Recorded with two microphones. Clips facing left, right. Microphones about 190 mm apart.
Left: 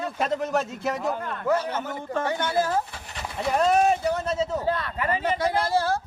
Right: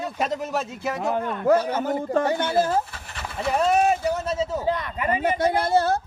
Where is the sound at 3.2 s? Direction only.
Centre (ahead or behind); by 5.2 s 15° right (ahead or behind).